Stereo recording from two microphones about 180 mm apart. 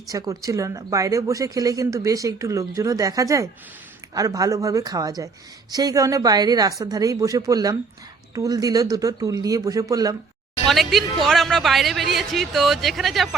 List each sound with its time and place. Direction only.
0.1 s a woman's voice: 20° right (ahead or behind)
10.7 s speech: centre (ahead or behind)